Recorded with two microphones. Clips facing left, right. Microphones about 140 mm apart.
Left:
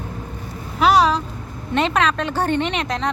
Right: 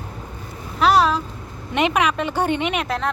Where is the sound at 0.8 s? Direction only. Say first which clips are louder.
Left 1 dB; centre (ahead or behind).